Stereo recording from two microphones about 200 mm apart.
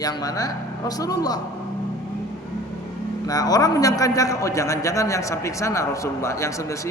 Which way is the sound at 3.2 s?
20° left (ahead or behind).